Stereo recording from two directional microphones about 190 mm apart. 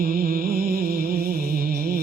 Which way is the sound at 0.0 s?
45° right (ahead or behind).